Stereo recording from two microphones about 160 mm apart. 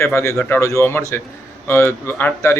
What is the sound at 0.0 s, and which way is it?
A man's voice, 15° left (ahead or behind).